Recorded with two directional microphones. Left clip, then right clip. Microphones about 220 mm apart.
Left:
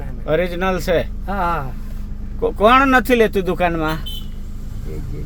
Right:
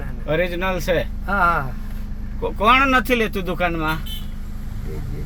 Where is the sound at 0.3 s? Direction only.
15° left (ahead or behind).